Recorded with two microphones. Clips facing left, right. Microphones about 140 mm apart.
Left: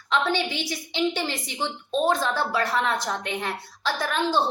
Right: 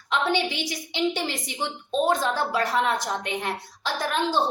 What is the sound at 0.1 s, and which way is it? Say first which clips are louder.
A woman's voice: even; 15° right (ahead or behind).